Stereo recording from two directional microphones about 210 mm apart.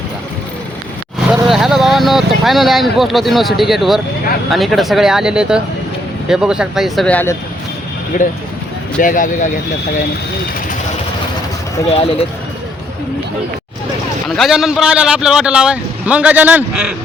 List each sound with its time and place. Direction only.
1.3 s speech: centre (ahead or behind)
8.1 s speech: 40° left (ahead or behind)
11.9 s speech: 25° left (ahead or behind)
14.3 s speech: centre (ahead or behind)